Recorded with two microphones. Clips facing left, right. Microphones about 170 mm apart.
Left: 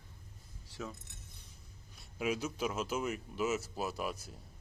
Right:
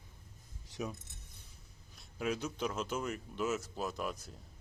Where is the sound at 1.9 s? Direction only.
5° left (ahead or behind).